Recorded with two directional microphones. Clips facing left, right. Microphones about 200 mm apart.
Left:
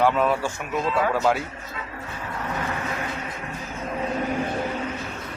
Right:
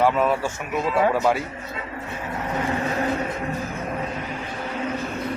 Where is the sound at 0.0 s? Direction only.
5° right (ahead or behind).